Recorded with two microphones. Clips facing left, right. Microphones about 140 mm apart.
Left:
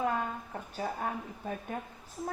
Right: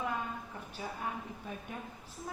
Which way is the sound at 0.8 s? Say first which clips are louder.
Left 4 dB; 50° left (ahead or behind).